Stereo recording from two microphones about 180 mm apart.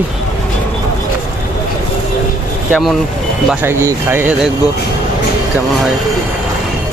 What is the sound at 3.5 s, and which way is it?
Speech, 10° right (ahead or behind).